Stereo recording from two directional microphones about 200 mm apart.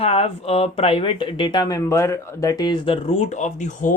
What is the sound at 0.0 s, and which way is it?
Speech, 30° left (ahead or behind).